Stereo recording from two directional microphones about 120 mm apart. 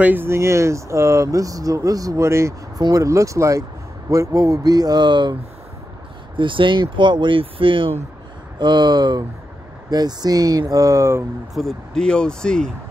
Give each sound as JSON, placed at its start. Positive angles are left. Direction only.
{"t": 0.0, "sound": "speech", "side_deg": -15}
{"t": 11.5, "sound": "speech", "side_deg": 5}